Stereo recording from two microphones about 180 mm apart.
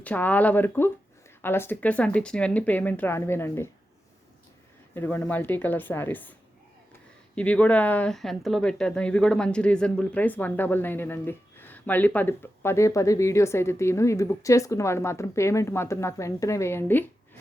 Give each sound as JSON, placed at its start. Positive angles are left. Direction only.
{"t": 0.0, "sound": "speech", "side_deg": 10}
{"t": 4.9, "sound": "speech", "side_deg": 10}
{"t": 7.3, "sound": "speech", "side_deg": 10}